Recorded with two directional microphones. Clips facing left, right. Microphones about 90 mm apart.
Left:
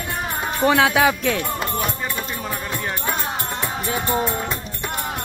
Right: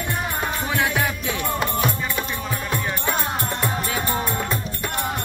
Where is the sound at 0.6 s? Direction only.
80° left.